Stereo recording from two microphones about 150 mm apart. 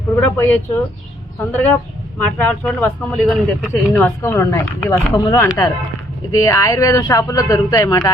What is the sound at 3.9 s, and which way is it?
A woman's voice, 10° left (ahead or behind).